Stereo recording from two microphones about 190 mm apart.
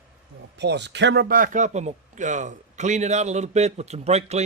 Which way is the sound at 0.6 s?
65° right (ahead or behind).